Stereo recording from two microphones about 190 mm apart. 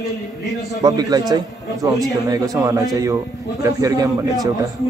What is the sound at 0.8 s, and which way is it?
A man's voice, 20° right (ahead or behind).